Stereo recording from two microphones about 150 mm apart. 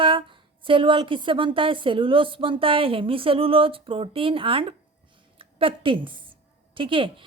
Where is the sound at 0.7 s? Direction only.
35° right (ahead or behind).